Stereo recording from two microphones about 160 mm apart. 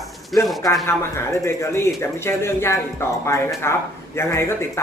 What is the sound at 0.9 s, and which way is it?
A man's voice, 15° left (ahead or behind).